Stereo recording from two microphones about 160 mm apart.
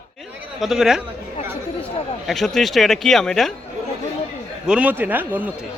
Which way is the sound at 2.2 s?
Centre (ahead or behind).